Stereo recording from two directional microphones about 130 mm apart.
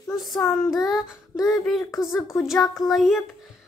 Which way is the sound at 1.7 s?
20° left (ahead or behind).